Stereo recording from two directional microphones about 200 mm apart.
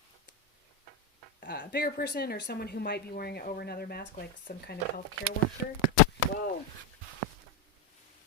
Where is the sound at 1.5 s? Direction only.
50° left (ahead or behind).